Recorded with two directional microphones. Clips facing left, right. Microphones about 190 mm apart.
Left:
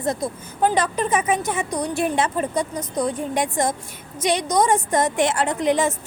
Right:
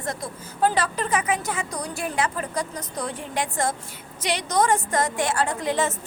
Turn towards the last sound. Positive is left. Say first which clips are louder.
# left 5 dB
turn(degrees=15)  # may be behind; listen again after turning